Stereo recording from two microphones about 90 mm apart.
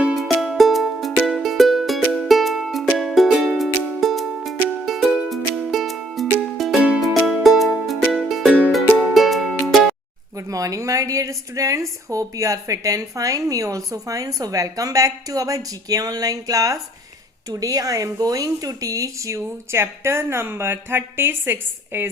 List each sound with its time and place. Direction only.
0.0 s music: centre (ahead or behind)
10.3 s a sound: 40° right (ahead or behind)
12.0 s a woman's voice: 40° right (ahead or behind)